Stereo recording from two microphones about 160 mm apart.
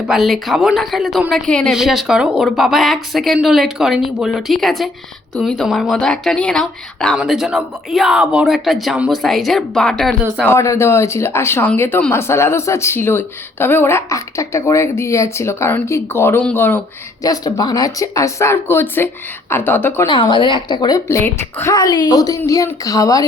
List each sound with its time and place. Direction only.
0.1 s speech: centre (ahead or behind)
10.4 s speech: 15° left (ahead or behind)
17.2 s speech: 25° left (ahead or behind)
20.1 s a woman's voice: 30° left (ahead or behind)